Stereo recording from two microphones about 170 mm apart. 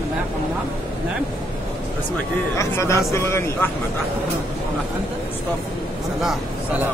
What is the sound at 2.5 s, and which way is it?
Speech, 15° left (ahead or behind).